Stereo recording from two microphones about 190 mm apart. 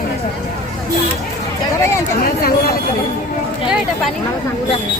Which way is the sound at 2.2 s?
50° left (ahead or behind).